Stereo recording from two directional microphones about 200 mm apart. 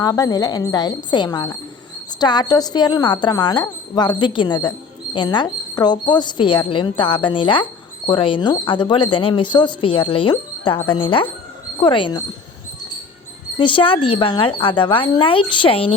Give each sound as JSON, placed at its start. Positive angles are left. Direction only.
{"t": 0.0, "sound": "speech", "side_deg": 20}
{"t": 13.6, "sound": "speech", "side_deg": 25}